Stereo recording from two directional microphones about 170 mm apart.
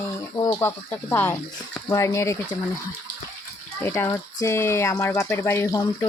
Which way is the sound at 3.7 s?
15° left (ahead or behind).